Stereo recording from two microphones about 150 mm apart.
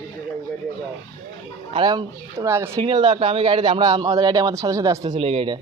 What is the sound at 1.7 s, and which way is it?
Speech, 30° right (ahead or behind).